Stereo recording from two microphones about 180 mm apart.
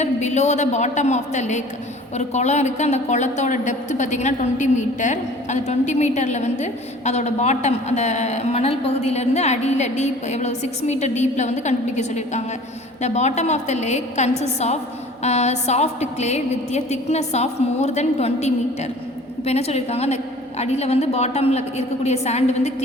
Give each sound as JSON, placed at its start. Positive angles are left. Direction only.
{"t": 0.0, "sound": "a woman's voice", "side_deg": 40}